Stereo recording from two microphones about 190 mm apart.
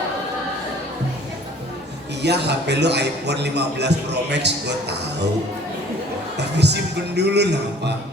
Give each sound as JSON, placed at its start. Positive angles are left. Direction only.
{"t": 2.2, "sound": "a man's voice", "side_deg": -60}
{"t": 6.6, "sound": "a man's voice", "side_deg": -65}